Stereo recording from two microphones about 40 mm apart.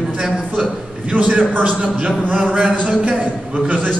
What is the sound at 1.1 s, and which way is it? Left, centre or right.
A man's voice, right.